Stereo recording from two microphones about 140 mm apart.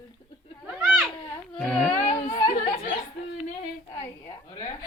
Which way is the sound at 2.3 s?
80° left.